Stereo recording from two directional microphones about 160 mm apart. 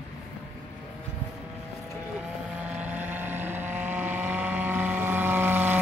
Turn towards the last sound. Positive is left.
turn(degrees=-15)  # may be behind; listen again after turning